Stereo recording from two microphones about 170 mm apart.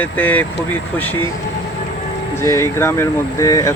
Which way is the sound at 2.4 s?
15° left (ahead or behind).